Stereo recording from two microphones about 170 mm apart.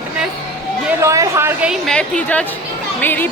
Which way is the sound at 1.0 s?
20° right (ahead or behind).